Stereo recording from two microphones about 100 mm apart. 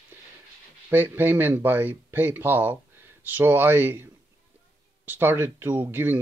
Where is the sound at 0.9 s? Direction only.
20° right (ahead or behind).